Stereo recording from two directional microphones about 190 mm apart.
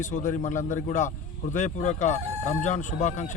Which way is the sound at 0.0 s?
40° left (ahead or behind).